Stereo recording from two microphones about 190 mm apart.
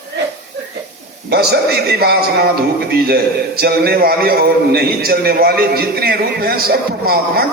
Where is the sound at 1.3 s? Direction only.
60° right (ahead or behind).